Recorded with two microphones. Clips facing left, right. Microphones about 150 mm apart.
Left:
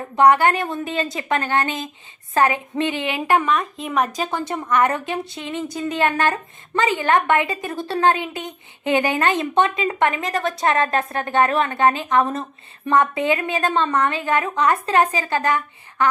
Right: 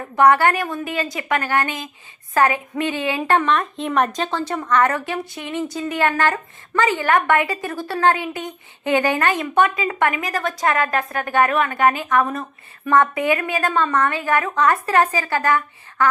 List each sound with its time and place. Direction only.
0.2 s a woman's voice: 20° left (ahead or behind); by 4.3 s centre (ahead or behind)
4.3 s a woman's voice: 15° left (ahead or behind)